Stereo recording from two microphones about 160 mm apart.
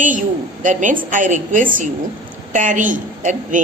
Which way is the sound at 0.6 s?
55° right (ahead or behind).